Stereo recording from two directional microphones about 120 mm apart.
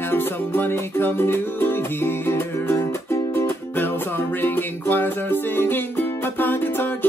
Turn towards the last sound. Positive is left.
turn(degrees=15)  # may be behind; listen again after turning